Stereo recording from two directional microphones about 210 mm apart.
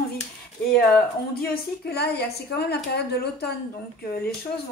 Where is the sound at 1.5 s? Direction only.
50° left (ahead or behind).